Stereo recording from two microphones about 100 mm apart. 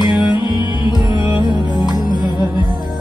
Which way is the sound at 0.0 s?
50° left (ahead or behind).